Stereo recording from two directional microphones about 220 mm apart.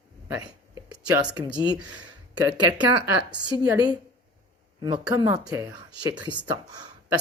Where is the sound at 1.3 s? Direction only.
20° right (ahead or behind).